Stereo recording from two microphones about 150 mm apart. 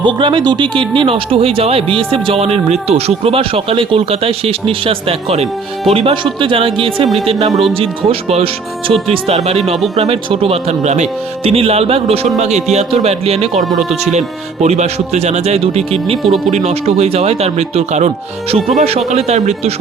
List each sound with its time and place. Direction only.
0.0 s speech: 35° right (ahead or behind)
7.7 s speech: 40° right (ahead or behind)
16.1 s speech: centre (ahead or behind)
16.5 s speech: 45° right (ahead or behind)